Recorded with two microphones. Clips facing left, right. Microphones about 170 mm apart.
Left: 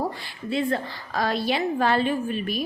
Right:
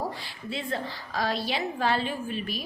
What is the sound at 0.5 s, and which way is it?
A woman's voice, 55° left (ahead or behind).